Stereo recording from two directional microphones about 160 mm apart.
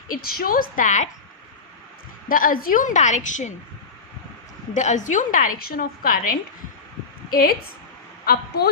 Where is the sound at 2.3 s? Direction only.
60° left (ahead or behind).